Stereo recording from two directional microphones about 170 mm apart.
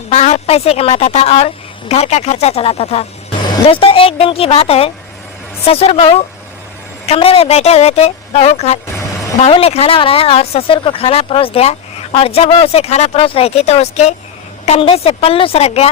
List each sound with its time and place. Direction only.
0.1 s speech: 40° left (ahead or behind)